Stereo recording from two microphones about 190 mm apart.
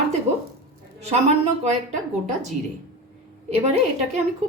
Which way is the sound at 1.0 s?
35° right (ahead or behind).